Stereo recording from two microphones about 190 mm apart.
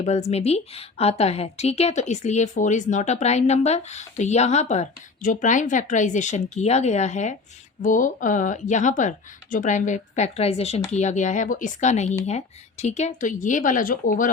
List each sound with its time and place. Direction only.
0.0 s a woman's voice: 35° left (ahead or behind)